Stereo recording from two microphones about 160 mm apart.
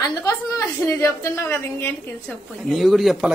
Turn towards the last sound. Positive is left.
turn(degrees=0)  # may be behind; listen again after turning